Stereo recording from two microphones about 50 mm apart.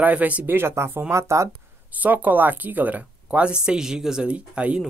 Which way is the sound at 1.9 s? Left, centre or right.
Right.